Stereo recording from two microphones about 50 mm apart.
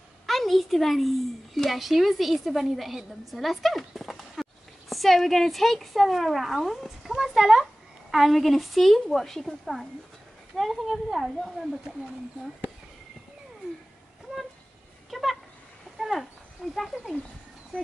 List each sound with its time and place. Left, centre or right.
0.3 s a woman's voice: centre
11.9 s speech: centre
15.0 s a sound: centre
16.7 s speech: centre